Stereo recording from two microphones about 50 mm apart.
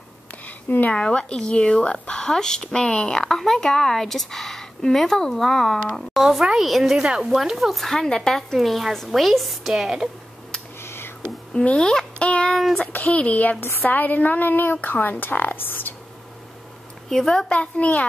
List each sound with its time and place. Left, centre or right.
0.5 s a sound: left
0.9 s a woman's voice: centre
7.0 s a woman's voice: centre
7.2 s a woman's voice: centre
8.5 s a woman's voice: centre
10.8 s a sound: left
11.5 s a child's voice: centre
13.6 s speech: left
13.8 s a woman's voice: left
17.1 s speech: centre
17.5 s speech: left